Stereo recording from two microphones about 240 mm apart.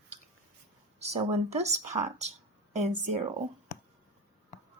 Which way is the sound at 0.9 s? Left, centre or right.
Right.